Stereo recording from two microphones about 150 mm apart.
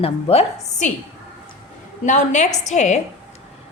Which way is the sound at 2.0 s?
55° left (ahead or behind).